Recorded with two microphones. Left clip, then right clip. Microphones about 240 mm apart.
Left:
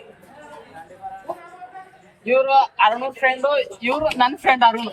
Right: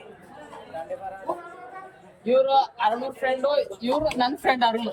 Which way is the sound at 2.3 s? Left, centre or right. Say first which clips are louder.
Left 4 dB; left.